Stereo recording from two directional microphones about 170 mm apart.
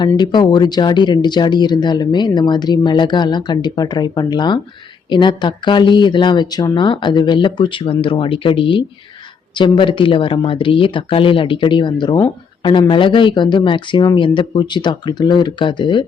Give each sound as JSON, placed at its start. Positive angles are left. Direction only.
{"t": 0.2, "sound": "speech", "side_deg": 25}